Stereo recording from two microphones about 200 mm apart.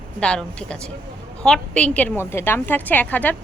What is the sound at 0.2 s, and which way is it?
A woman's voice, 5° left (ahead or behind).